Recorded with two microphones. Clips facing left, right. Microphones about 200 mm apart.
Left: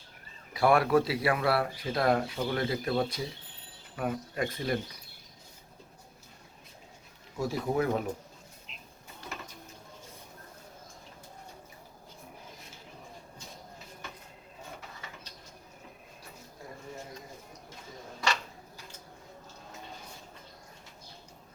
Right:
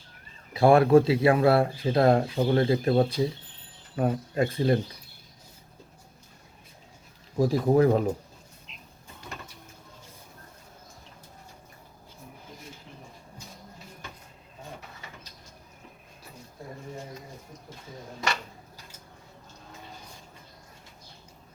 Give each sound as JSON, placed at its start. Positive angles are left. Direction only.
{"t": 0.5, "sound": "speech", "side_deg": -30}
{"t": 7.3, "sound": "speech", "side_deg": -40}